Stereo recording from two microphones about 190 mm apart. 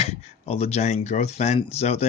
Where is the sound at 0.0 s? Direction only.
35° left (ahead or behind).